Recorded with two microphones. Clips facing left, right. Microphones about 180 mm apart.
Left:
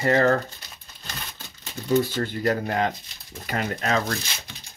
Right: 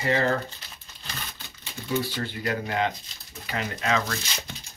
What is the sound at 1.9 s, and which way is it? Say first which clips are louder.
Speech: left 6 dB; 45° left (ahead or behind).